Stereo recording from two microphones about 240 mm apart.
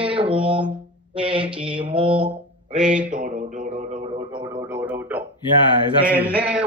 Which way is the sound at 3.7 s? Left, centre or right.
Right.